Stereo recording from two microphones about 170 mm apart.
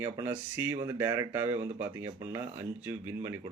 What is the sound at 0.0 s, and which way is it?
Speech, 15° right (ahead or behind).